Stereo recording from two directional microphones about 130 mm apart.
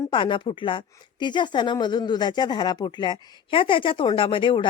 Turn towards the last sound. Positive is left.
turn(degrees=40)  # may be behind; listen again after turning